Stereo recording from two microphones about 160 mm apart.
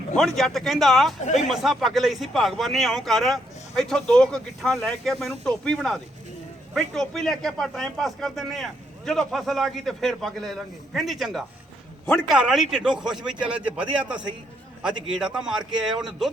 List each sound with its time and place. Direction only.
0.2 s speech: centre (ahead or behind)